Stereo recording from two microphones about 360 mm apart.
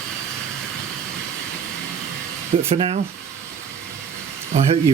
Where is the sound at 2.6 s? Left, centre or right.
Centre.